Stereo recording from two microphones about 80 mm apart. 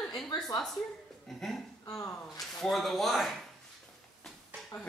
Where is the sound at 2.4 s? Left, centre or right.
Centre.